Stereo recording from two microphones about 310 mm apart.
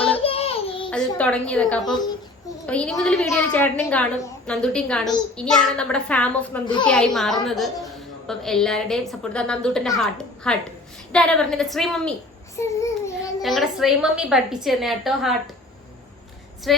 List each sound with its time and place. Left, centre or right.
0.2 s a sound: centre
0.9 s a child's voice: centre
16.7 s a child's voice: centre